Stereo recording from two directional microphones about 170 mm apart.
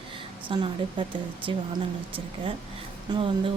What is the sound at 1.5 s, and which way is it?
Speech, 30° right (ahead or behind).